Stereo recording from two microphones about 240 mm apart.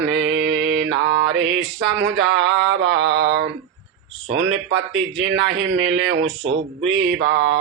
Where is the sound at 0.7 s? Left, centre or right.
Right.